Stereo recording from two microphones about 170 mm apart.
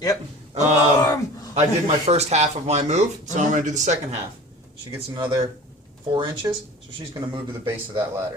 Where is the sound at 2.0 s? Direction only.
40° right (ahead or behind).